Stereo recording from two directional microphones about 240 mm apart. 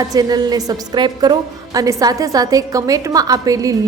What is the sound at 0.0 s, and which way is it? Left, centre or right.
A woman's voice, centre.